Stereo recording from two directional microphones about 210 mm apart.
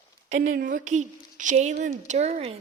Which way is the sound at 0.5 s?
40° right (ahead or behind).